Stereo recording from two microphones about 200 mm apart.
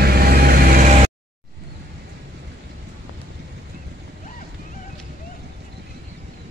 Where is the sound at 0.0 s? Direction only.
50° right (ahead or behind).